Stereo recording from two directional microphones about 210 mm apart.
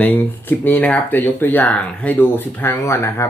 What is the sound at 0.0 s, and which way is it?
Speech, 10° left (ahead or behind).